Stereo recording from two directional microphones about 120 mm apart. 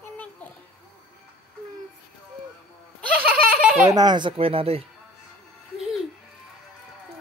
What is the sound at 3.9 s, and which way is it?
Speech, 35° right (ahead or behind).